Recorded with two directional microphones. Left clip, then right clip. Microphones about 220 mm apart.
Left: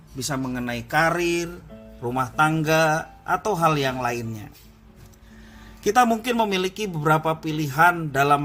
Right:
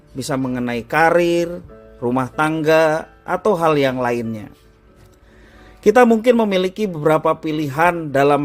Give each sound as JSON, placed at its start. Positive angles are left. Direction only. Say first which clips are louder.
{"t": 0.2, "sound": "speech", "louder": "right 6 dB", "side_deg": -35}
{"t": 5.8, "sound": "speech", "louder": "right 7 dB", "side_deg": -30}